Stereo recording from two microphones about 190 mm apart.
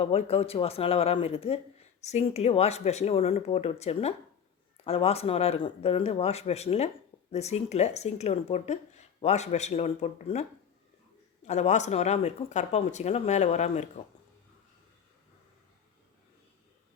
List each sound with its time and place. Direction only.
0.0 s speech: 30° left (ahead or behind)
11.4 s speech: 35° left (ahead or behind)